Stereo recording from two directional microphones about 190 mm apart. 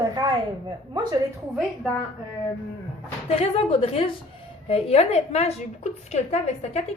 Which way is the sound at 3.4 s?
30° left (ahead or behind).